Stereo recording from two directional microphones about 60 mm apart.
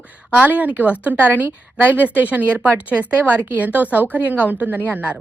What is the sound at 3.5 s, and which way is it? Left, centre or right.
A woman's voice, right.